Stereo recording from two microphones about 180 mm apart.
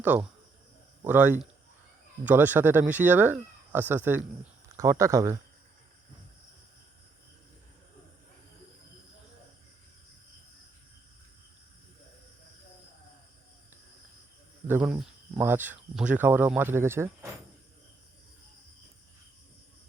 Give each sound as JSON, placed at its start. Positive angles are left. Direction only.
{"t": 1.0, "sound": "speech", "side_deg": -10}
{"t": 14.7, "sound": "speech", "side_deg": -5}